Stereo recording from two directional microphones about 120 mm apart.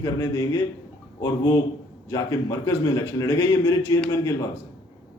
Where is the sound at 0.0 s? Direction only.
25° left (ahead or behind).